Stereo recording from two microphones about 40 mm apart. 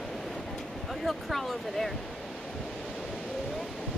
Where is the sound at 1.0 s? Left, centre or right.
Centre.